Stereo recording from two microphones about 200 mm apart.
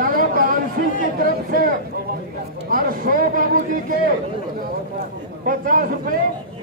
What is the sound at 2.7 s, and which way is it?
Speech, 45° right (ahead or behind).